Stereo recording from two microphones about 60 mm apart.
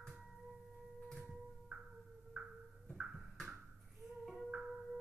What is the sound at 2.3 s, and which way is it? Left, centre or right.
Music, centre.